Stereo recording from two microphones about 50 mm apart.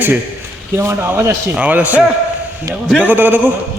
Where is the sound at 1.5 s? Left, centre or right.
Right.